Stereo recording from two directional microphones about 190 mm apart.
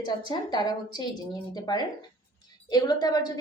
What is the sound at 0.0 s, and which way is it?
A woman's voice, 20° left (ahead or behind).